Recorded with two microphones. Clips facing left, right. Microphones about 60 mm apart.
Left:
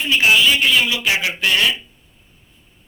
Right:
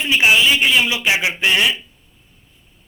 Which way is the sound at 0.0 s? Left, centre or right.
Centre.